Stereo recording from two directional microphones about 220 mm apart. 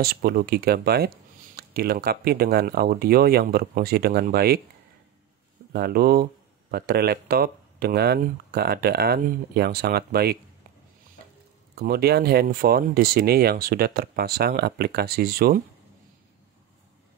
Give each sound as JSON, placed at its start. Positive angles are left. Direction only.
{"t": 0.0, "sound": "speech", "side_deg": -45}
{"t": 5.7, "sound": "speech", "side_deg": -45}
{"t": 11.7, "sound": "speech", "side_deg": -45}